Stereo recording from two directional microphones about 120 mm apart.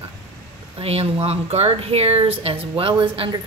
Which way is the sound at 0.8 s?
55° right (ahead or behind).